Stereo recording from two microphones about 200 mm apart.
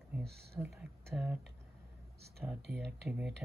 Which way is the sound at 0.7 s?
Centre (ahead or behind).